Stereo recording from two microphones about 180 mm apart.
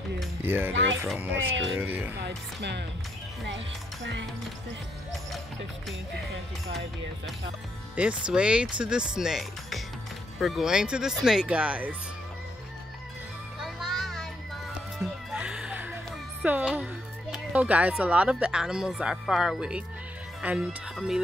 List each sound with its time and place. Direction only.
0.4 s speech: 10° right (ahead or behind)
2.1 s speech: 70° right (ahead or behind)
3.4 s speech: 80° right
7.9 s speech: 5° right (ahead or behind)
13.6 s music: centre (ahead or behind)
16.4 s speech: 10° right (ahead or behind)